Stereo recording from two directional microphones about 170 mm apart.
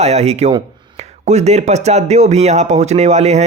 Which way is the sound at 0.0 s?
40° right (ahead or behind).